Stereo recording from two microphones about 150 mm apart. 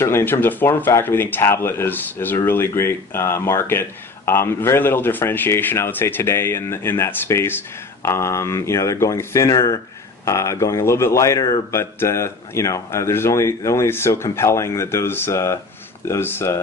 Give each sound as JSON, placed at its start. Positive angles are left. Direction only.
{"t": 0.0, "sound": "speech", "side_deg": 15}